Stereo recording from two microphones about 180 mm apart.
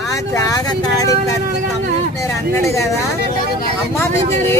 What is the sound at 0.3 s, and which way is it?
Speech, 20° left (ahead or behind).